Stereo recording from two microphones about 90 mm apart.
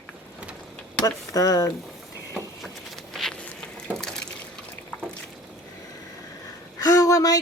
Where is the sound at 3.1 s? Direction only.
5° left (ahead or behind).